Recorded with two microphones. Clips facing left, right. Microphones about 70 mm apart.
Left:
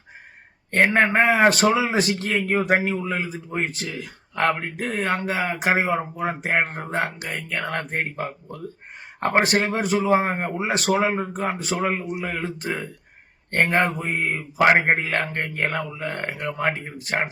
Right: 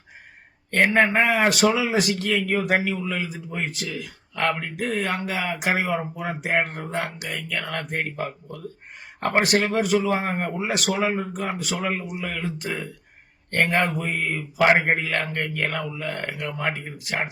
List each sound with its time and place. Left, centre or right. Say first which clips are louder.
0.8 s a man's voice: left 1 dB; left
14.8 s a man's voice: left 2 dB; left